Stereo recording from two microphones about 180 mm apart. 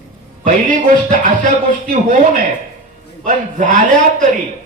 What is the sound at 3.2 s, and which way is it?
A man's voice, 45° right (ahead or behind).